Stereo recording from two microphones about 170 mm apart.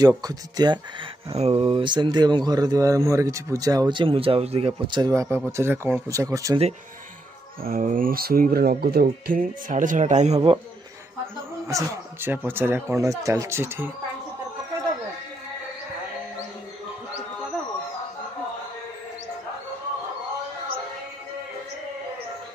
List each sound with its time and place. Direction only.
0.0 s speech: 20° right (ahead or behind)
1.3 s speech: 35° right (ahead or behind); by 6.6 s 20° right (ahead or behind)
7.6 s speech: 55° right (ahead or behind)
9.0 s speech: 50° right (ahead or behind)
11.6 s speech: 15° right (ahead or behind)